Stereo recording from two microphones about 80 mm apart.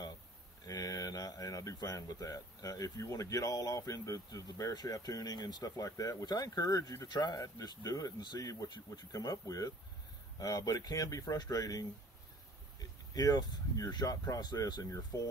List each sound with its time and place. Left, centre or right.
0.7 s speech: left
7.1 s speech: left
7.3 s speech: left
8.6 s speech: left